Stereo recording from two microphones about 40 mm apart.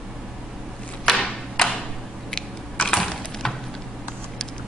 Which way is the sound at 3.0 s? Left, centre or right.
Centre.